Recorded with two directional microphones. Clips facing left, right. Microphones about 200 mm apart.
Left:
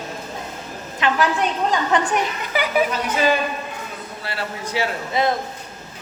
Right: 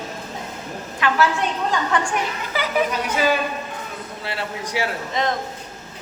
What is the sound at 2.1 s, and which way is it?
Speech, 15° left (ahead or behind).